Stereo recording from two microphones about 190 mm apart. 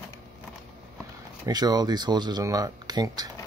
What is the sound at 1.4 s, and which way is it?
Speech, 20° right (ahead or behind).